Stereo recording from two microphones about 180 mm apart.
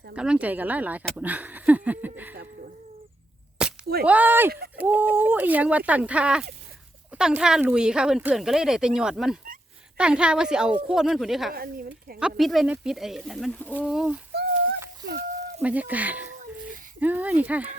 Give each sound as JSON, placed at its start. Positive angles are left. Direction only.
{"t": 0.2, "sound": "speech", "side_deg": -5}
{"t": 3.6, "sound": "a sound", "side_deg": -5}
{"t": 4.0, "sound": "speech", "side_deg": -10}
{"t": 11.5, "sound": "speech", "side_deg": -55}
{"t": 12.4, "sound": "speech", "side_deg": 0}
{"t": 13.7, "sound": "speech", "side_deg": -5}
{"t": 15.6, "sound": "speech", "side_deg": -10}